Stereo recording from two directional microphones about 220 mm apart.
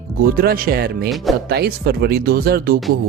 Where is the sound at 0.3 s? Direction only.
40° right (ahead or behind).